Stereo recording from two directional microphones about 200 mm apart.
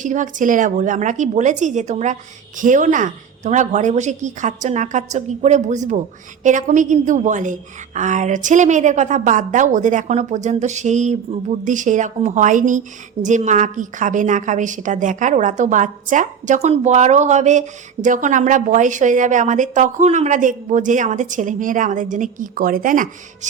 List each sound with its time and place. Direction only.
0.0 s a woman's voice: 40° right (ahead or behind)